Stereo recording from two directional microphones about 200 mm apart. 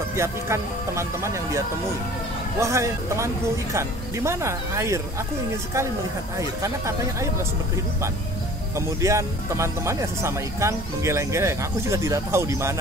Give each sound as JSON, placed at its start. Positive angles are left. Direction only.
{"t": 0.1, "sound": "speech", "side_deg": -15}
{"t": 2.6, "sound": "speech", "side_deg": -15}
{"t": 6.3, "sound": "speech", "side_deg": -15}
{"t": 8.7, "sound": "speech", "side_deg": -15}